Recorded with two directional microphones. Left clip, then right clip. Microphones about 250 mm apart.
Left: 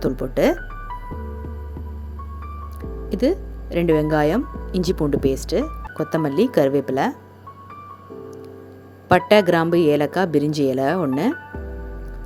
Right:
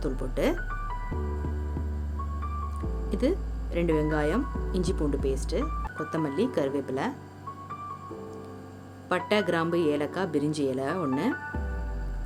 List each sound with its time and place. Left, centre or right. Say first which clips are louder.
0.0 s speech: left 10 dB; left
3.1 s speech: left 8 dB; left
9.0 s speech: left 12 dB; left